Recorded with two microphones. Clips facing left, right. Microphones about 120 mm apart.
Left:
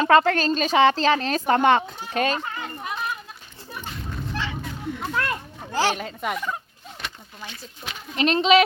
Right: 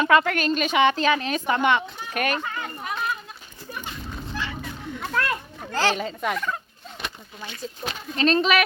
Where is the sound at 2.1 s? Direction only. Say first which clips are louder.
Left 2 dB; 25° left (ahead or behind).